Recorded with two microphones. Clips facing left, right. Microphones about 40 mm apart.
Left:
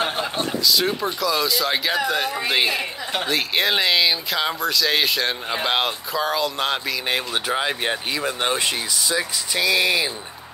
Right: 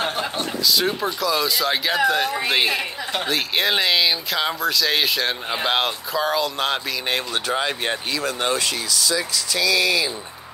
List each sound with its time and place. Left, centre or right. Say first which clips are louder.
0.7 s speech: right 1 dB; centre
8.1 s speech: right 2 dB; centre